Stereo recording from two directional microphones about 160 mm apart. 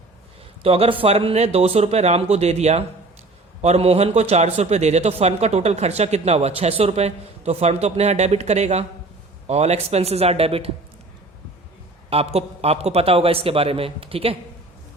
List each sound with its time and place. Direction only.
0.6 s a man's voice: 35° right (ahead or behind)
12.1 s a man's voice: 40° right (ahead or behind)